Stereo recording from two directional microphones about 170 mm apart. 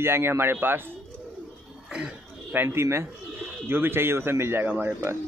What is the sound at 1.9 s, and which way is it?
Throat clearing, 5° right (ahead or behind).